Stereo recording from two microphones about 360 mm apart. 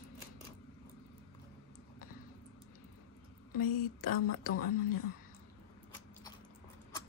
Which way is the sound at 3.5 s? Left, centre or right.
Left.